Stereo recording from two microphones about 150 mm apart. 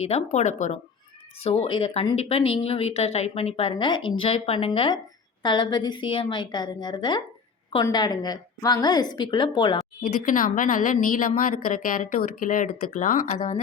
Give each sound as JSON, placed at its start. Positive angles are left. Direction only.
{"t": 0.0, "sound": "speech", "side_deg": 45}
{"t": 1.6, "sound": "a woman's voice", "side_deg": 35}
{"t": 10.0, "sound": "speech", "side_deg": 65}